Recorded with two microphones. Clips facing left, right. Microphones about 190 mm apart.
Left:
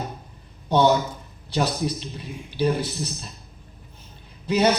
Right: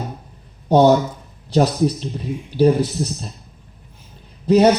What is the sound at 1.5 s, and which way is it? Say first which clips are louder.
Speech: right 8 dB; 40° right (ahead or behind).